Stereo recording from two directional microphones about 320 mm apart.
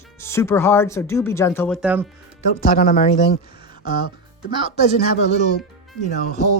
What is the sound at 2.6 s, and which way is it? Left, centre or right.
Speech, left.